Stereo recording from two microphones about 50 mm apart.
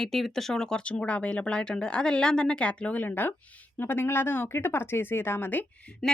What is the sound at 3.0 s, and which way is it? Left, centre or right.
Speech, left.